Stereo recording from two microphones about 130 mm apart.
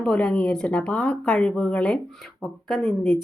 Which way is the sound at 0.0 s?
5° left (ahead or behind).